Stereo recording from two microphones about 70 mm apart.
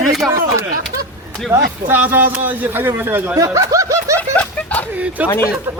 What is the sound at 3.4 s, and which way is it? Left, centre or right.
Snicker, right.